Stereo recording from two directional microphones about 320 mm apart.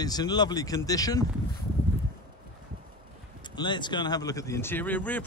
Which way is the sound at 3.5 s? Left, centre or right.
Centre.